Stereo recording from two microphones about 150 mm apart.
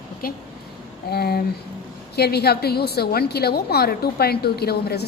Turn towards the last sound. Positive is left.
turn(degrees=90)